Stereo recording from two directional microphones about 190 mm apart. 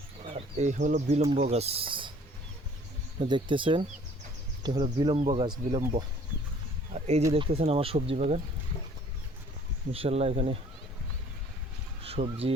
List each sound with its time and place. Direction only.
0.3 s speech: 35° right (ahead or behind)
3.2 s speech: 25° right (ahead or behind)
7.3 s speech: 30° right (ahead or behind)
9.9 s speech: 30° right (ahead or behind)
12.0 s speech: 30° right (ahead or behind)